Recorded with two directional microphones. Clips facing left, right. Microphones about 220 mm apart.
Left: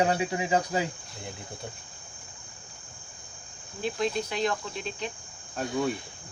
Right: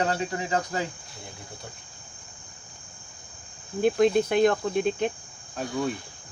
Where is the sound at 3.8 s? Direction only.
55° right (ahead or behind).